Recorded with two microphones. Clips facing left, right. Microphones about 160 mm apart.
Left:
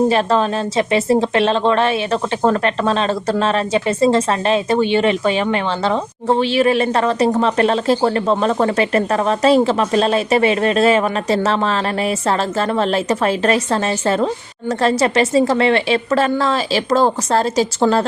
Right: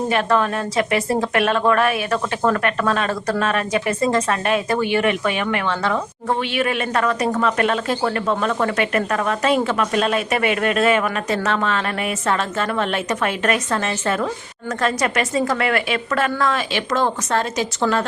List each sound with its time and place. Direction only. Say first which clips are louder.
0.1 s a woman's voice: left 3 dB; 30° left (ahead or behind)
14.8 s a woman's voice: left 5 dB; 30° left (ahead or behind)